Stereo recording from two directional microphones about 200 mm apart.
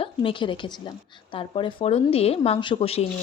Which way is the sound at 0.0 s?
25° left (ahead or behind).